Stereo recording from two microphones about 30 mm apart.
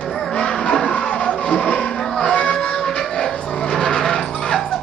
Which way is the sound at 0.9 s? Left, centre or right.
Left.